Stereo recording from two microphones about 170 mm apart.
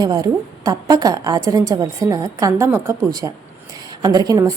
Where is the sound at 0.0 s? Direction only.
25° right (ahead or behind).